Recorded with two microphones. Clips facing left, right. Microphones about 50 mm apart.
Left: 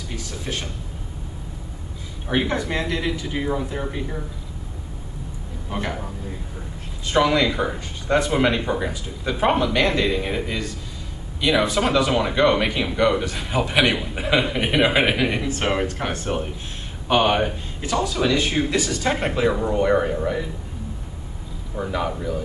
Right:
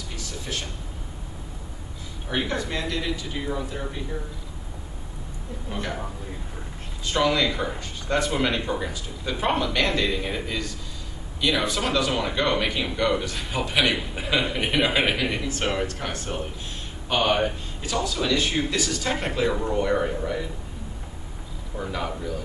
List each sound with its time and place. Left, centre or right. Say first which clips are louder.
0.1 s speech: left 3 dB; left
2.2 s speech: left 5 dB; left
5.7 s speech: left 4 dB; centre
7.1 s speech: left 4 dB; centre
17.1 s speech: left 4 dB; centre
21.7 s speech: left 5 dB; centre